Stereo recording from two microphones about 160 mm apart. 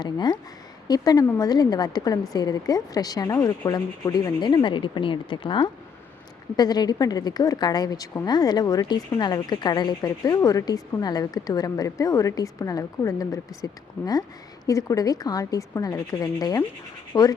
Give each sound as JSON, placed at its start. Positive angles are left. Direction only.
{"t": 0.0, "sound": "a woman's voice", "side_deg": 25}